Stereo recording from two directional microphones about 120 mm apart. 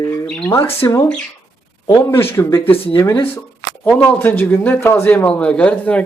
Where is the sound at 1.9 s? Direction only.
20° left (ahead or behind).